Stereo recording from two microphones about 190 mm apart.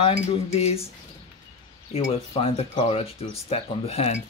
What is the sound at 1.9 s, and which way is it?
Speech, 30° left (ahead or behind).